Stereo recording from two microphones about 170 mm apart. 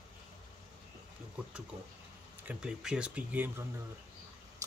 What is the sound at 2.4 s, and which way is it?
Speech, 5° right (ahead or behind).